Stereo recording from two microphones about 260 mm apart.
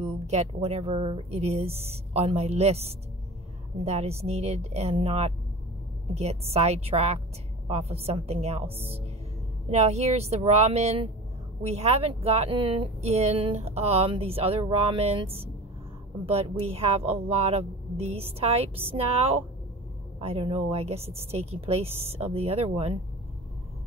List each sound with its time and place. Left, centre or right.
0.0 s speech: right